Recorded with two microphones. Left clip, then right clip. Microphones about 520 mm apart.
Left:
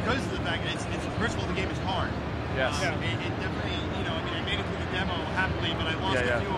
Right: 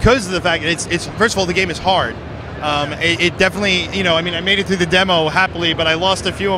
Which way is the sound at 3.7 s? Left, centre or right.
Right.